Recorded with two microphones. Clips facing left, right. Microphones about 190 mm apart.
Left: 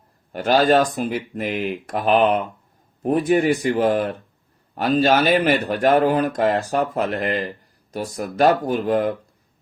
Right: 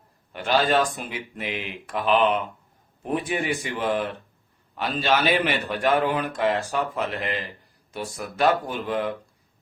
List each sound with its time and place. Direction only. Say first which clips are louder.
0.3 s a man's voice: left 5 dB; 40° left (ahead or behind)